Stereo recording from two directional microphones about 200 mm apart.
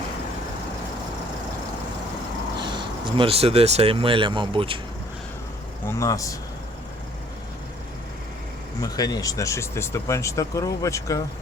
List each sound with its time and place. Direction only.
2.6 s speech: 25° right (ahead or behind)
6.0 s speech: 15° left (ahead or behind)
8.8 s speech: 20° left (ahead or behind)